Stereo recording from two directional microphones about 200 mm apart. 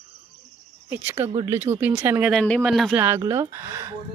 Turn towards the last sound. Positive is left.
turn(degrees=-15)  # may be behind; listen again after turning